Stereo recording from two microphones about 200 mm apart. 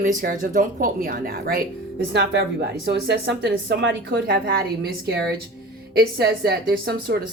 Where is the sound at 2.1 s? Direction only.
55° right (ahead or behind).